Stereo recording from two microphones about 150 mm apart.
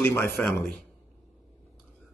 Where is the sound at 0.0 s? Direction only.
15° left (ahead or behind).